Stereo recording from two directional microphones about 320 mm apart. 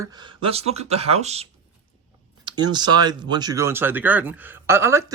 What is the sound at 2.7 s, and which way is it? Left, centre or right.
Speech, centre.